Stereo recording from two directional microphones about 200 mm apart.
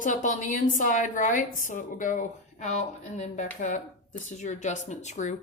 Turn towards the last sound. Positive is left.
turn(degrees=35)  # may be behind; listen again after turning